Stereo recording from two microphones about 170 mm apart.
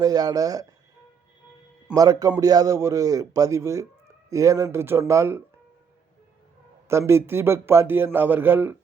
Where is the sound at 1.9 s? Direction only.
20° right (ahead or behind).